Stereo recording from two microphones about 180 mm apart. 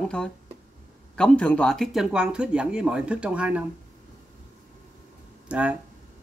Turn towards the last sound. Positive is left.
turn(degrees=-10)  # may be behind; listen again after turning